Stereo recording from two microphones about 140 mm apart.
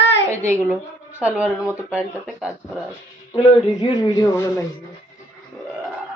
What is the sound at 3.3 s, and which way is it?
Speech, 35° left (ahead or behind).